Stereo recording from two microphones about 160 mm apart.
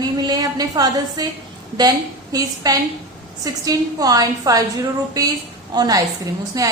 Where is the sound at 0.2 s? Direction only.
25° right (ahead or behind).